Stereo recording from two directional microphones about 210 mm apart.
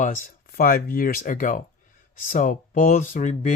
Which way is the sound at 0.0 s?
40° left (ahead or behind).